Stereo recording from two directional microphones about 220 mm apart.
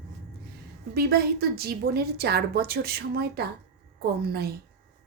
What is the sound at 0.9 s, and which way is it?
A woman's voice, 45° right (ahead or behind).